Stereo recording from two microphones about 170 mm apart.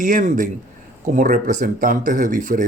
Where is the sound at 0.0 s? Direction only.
50° right (ahead or behind).